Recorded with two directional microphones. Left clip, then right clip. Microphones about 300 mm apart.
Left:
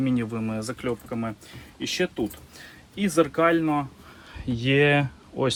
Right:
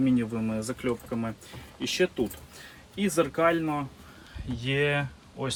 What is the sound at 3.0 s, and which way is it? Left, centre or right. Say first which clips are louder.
Speech: left 3 dB; left.